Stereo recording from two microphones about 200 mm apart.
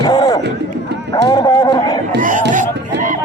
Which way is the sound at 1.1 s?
20° left (ahead or behind).